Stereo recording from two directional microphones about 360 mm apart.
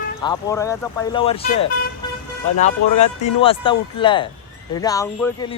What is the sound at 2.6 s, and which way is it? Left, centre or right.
Speech, centre.